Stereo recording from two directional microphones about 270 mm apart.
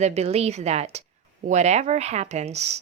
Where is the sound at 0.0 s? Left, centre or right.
Right.